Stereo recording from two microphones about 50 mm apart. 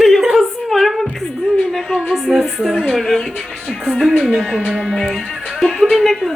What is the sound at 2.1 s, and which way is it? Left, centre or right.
Speech, centre.